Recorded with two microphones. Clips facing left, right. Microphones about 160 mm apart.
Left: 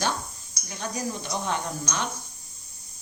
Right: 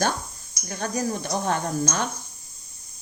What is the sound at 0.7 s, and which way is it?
Speech, 50° right (ahead or behind).